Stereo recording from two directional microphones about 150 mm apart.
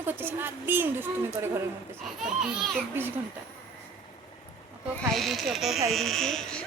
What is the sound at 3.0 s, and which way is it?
Speech, 15° right (ahead or behind).